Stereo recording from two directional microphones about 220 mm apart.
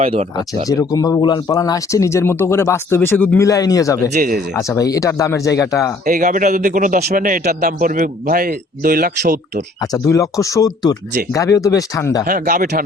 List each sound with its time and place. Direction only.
0.0 s speech: 30° right (ahead or behind)
0.3 s speech: 15° left (ahead or behind)
4.1 s a man's voice: 40° right (ahead or behind)
4.5 s speech: 15° left (ahead or behind)
6.1 s a man's voice: 35° right (ahead or behind)
9.8 s speech: 15° left (ahead or behind)
12.2 s a man's voice: 40° right (ahead or behind)